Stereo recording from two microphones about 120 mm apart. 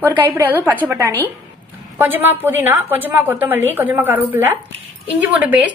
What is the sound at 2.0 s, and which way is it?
A woman's voice, 15° right (ahead or behind).